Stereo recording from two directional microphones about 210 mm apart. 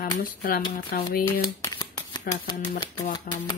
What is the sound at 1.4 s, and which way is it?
Speech, 20° left (ahead or behind).